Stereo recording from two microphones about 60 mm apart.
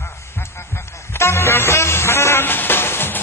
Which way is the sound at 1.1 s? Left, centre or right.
Left.